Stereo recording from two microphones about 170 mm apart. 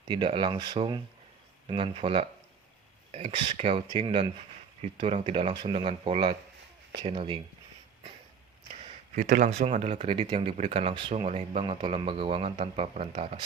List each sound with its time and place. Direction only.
0.1 s speech: 30° right (ahead or behind)
8.8 s speech: 50° right (ahead or behind)